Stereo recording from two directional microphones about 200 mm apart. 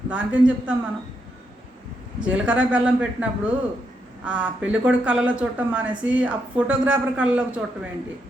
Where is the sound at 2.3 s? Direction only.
5° right (ahead or behind).